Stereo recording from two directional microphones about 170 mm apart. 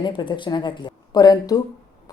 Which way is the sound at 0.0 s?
25° left (ahead or behind).